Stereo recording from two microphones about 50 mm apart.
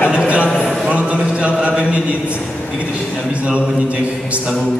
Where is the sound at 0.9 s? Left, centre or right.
Right.